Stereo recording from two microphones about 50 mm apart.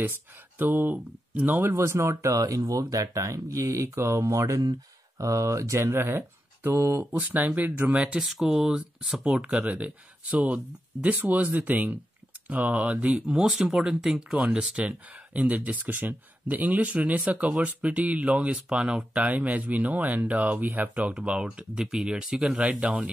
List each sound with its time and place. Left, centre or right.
0.6 s speech: right
1.7 s speech: right
3.1 s speech: right
5.8 s speech: right
7.2 s speech: right
8.2 s speech: centre
8.5 s speech: centre
9.2 s speech: right
13.7 s speech: centre